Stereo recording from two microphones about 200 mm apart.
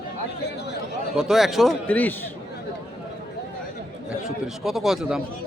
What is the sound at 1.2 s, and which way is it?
Speech, centre (ahead or behind).